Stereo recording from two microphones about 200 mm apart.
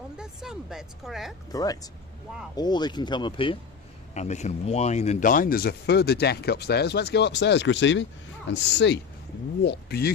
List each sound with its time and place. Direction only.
0.2 s a woman's voice: centre (ahead or behind)
1.5 s speech: 20° left (ahead or behind); by 10.1 s 55° left (ahead or behind)